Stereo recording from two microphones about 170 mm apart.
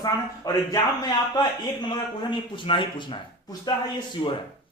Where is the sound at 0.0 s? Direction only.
20° left (ahead or behind).